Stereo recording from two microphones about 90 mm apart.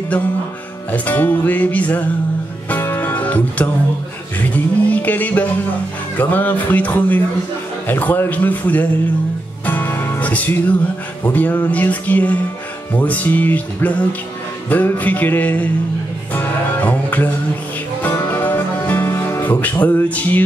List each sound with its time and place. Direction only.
0.9 s music: 20° left (ahead or behind)